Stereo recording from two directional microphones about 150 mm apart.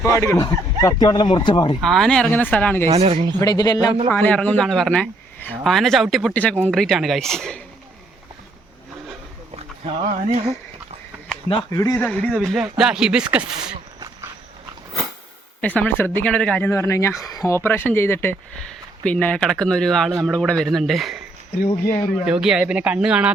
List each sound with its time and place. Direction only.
0.0 s speech: 20° left (ahead or behind)
1.8 s speech: centre (ahead or behind)
2.8 s speech: 45° right (ahead or behind)
3.4 s speech: 25° left (ahead or behind)
4.1 s a man's voice: 10° left (ahead or behind)
10.1 s speech: 45° right (ahead or behind)
11.7 s speech: 20° left (ahead or behind)
12.0 s a man's voice: 10° left (ahead or behind)
15.6 s a man's voice: 10° left (ahead or behind)
22.3 s speech: 5° right (ahead or behind)